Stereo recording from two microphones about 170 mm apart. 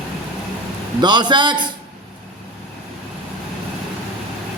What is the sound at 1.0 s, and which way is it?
Speech, 25° right (ahead or behind).